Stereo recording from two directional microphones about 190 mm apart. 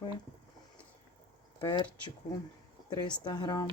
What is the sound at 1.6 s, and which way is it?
Speech, 20° left (ahead or behind).